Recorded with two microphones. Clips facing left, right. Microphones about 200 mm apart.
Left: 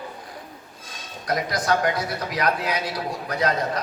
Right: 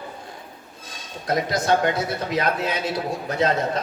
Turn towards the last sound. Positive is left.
turn(degrees=-25)  # may be behind; listen again after turning